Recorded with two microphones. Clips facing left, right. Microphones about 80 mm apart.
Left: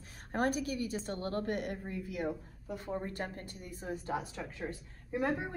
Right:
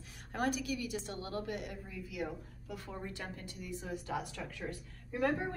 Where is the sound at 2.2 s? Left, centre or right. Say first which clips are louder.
Left 5 dB; left.